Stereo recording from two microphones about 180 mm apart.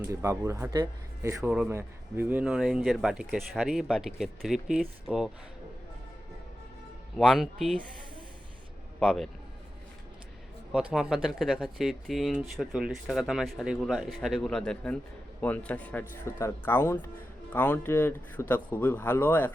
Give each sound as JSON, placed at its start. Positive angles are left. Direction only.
{"t": 0.1, "sound": "speech", "side_deg": -15}
{"t": 1.4, "sound": "speech", "side_deg": -5}
{"t": 7.2, "sound": "speech", "side_deg": 0}
{"t": 9.0, "sound": "speech", "side_deg": 0}
{"t": 10.7, "sound": "speech", "side_deg": -5}